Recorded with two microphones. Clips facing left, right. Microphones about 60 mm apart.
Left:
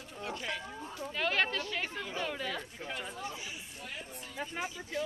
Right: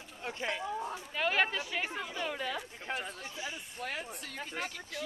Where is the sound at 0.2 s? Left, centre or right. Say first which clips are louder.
Right 2 dB; right.